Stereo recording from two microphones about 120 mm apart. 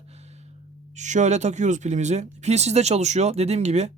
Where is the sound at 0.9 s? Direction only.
90° right; by 3.9 s 65° right (ahead or behind).